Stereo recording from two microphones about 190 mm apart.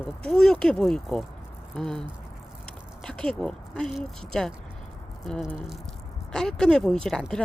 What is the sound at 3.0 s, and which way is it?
Speech, 5° left (ahead or behind).